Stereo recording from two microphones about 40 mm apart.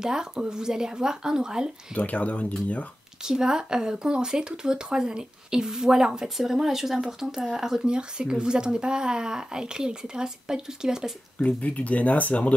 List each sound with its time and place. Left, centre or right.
0.0 s speech: centre
2.0 s speech: left
3.3 s speech: centre
6.2 s speech: centre
7.8 s speech: right
11.3 s speech: left